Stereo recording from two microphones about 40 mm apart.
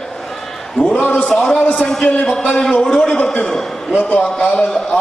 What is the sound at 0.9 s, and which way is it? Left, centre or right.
A man's voice, left.